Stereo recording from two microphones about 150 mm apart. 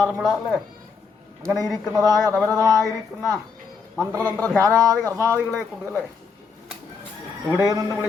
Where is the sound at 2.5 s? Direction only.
20° right (ahead or behind).